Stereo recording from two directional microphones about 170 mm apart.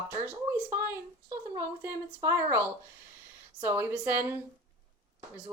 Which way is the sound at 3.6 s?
10° right (ahead or behind).